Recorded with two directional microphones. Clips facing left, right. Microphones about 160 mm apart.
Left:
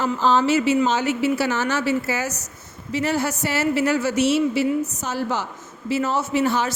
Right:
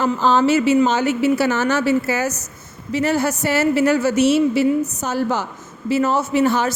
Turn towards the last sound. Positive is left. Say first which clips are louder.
# right 4 dB
turn(degrees=-50)  # may be behind; listen again after turning